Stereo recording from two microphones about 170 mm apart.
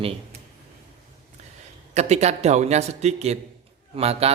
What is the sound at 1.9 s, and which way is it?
A man's voice, 40° right (ahead or behind).